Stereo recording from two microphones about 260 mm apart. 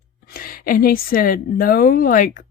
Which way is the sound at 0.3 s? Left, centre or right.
Left.